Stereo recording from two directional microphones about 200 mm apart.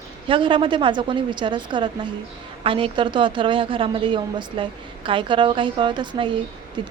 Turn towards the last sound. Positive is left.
turn(degrees=-25)  # may be behind; listen again after turning